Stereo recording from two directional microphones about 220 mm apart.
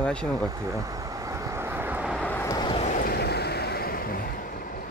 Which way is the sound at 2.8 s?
40° left (ahead or behind).